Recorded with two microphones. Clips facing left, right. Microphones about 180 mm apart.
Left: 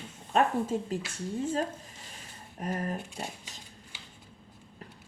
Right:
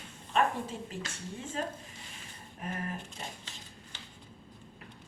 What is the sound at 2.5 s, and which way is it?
Speech, 40° left (ahead or behind).